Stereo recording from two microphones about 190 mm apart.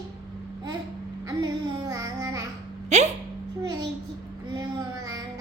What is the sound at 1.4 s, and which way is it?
Music, 20° right (ahead or behind).